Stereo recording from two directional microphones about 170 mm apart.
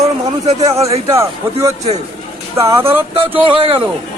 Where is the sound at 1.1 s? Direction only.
15° right (ahead or behind).